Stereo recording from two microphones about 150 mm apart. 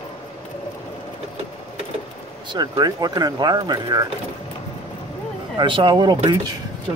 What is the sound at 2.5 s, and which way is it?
Speech, 25° right (ahead or behind).